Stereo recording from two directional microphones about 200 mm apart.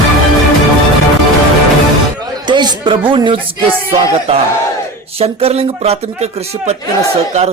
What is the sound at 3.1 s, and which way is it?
Music, 25° right (ahead or behind).